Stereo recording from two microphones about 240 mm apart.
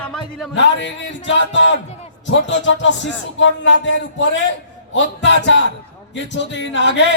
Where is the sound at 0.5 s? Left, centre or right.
Left.